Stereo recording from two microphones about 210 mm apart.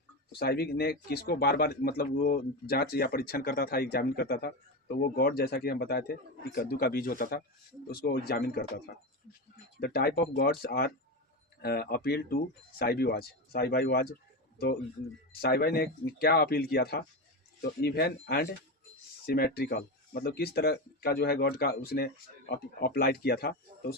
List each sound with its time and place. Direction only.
0.3 s speech: 50° left (ahead or behind)
9.8 s speech: 50° left (ahead or behind)
15.3 s speech: 50° left (ahead or behind)